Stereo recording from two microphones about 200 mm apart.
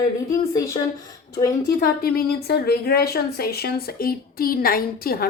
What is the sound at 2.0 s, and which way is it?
Speech, 50° left (ahead or behind).